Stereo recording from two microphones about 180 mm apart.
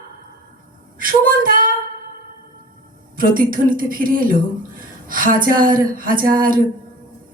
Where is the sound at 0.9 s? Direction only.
50° right (ahead or behind).